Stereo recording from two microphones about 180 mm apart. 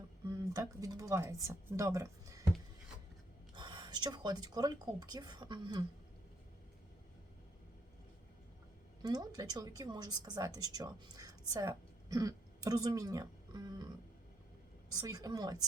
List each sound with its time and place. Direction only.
0.3 s speech: 20° right (ahead or behind)
3.5 s speech: 25° right (ahead or behind)
9.0 s a woman's voice: 20° right (ahead or behind)
14.8 s speech: 20° right (ahead or behind)